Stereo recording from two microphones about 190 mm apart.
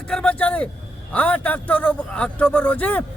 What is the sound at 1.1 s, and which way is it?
A man's voice, 5° left (ahead or behind).